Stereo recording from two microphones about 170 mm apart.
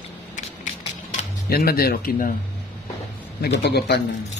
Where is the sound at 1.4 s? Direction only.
65° left (ahead or behind).